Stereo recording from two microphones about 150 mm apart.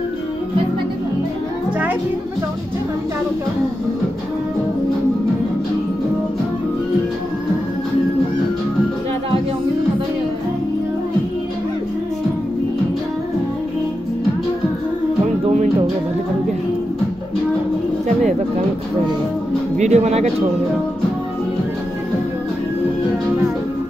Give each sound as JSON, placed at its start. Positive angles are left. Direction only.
{"t": 19.8, "sound": "speech", "side_deg": -50}